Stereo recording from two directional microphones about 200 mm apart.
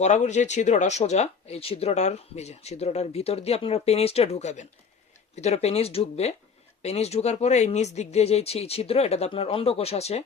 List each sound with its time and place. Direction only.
0.0 s speech: 35° left (ahead or behind)